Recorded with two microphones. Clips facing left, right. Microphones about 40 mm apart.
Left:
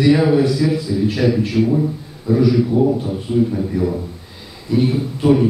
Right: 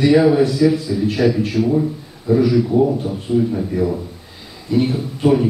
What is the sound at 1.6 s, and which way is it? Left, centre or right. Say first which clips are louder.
A man's voice: even; centre.